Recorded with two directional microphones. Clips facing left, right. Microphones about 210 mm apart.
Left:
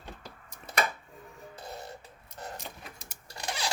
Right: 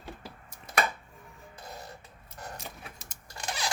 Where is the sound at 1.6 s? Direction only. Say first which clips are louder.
Left 2 dB; 30° left (ahead or behind).